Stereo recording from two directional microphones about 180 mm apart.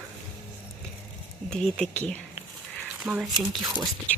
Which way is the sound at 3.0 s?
5° right (ahead or behind).